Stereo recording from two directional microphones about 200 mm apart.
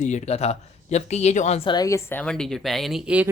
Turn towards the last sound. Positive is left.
turn(degrees=-5)  # may be behind; listen again after turning